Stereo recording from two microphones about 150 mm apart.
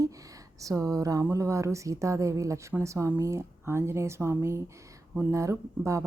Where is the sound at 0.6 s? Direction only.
25° right (ahead or behind).